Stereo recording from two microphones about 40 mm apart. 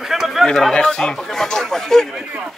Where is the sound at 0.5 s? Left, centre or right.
Centre.